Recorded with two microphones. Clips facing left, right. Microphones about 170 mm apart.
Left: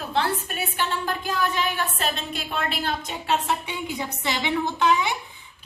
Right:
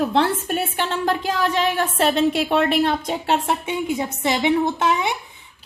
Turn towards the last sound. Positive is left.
turn(degrees=-50)  # may be behind; listen again after turning